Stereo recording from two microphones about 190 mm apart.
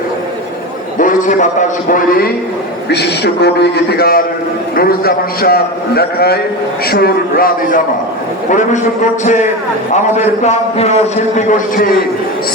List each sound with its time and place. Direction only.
0.9 s a man's voice: 45° left (ahead or behind)
2.9 s a man's voice: 60° left (ahead or behind); by 11.9 s 40° left (ahead or behind)